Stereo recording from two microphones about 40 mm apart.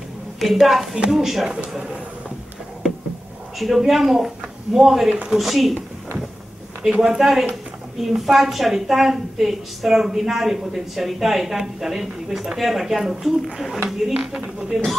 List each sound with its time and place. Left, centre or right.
0.4 s a woman's voice: centre
0.7 s a woman's voice: centre
1.1 s speech: centre
3.5 s a woman's voice: centre
6.8 s a woman's voice: centre